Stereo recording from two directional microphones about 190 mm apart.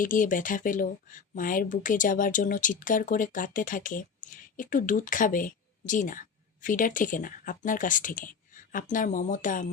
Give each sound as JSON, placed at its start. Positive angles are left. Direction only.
{"t": 0.0, "sound": "speech", "side_deg": 45}